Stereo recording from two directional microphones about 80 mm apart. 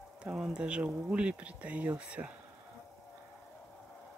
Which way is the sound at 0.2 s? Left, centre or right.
Centre.